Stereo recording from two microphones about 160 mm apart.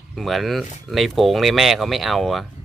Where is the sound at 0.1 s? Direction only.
Centre (ahead or behind).